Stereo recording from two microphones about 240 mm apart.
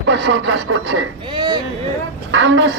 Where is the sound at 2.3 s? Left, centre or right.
Right.